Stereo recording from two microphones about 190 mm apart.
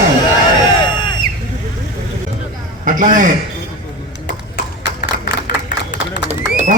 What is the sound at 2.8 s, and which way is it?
Speech, 45° right (ahead or behind).